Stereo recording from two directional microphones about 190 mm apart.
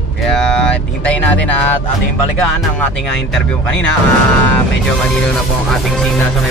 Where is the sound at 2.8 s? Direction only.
5° left (ahead or behind).